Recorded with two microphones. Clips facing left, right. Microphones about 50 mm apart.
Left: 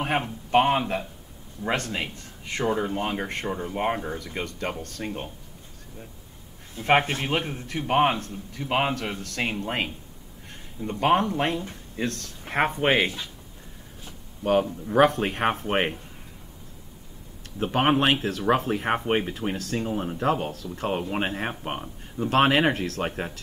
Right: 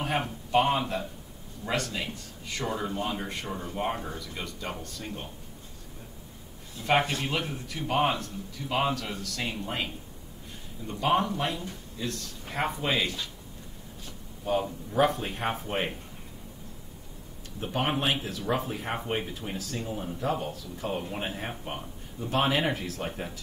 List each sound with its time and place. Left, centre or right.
0.5 s a man's voice: left
3.4 s speech: left
3.7 s a man's voice: left
6.8 s a man's voice: left
11.0 s speech: left
14.4 s speech: left
17.6 s speech: left